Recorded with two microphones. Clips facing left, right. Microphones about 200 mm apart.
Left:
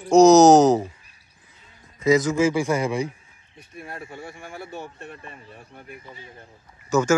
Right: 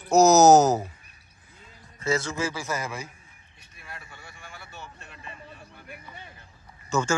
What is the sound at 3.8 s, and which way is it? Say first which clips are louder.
Speech: left 10 dB; 50° left (ahead or behind).